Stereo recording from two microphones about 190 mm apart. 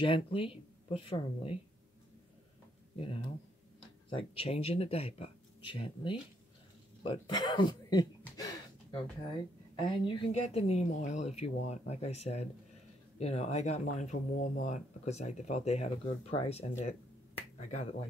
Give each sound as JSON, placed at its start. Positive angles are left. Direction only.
{"t": 0.0, "sound": "speech", "side_deg": 30}
{"t": 3.0, "sound": "speech", "side_deg": 30}
{"t": 9.8, "sound": "speech", "side_deg": 25}